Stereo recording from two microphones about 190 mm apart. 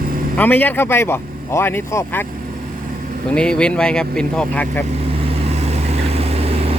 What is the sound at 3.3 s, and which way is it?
Speech, 5° left (ahead or behind).